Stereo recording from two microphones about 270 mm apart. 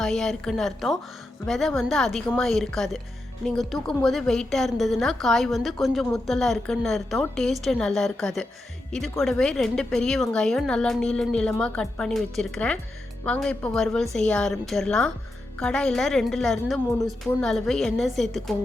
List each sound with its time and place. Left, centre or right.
0.0 s a woman's voice: centre